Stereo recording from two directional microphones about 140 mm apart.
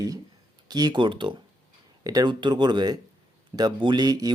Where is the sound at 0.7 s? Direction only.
30° right (ahead or behind).